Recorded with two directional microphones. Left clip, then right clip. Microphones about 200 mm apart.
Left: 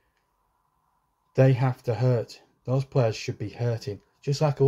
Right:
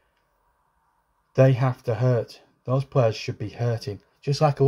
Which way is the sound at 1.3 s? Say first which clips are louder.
Right 3 dB; 5° right (ahead or behind).